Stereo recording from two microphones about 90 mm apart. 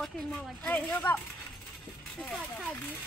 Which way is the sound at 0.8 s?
25° left (ahead or behind).